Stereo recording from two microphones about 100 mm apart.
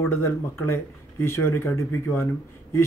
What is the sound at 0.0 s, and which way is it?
Speech, 25° left (ahead or behind).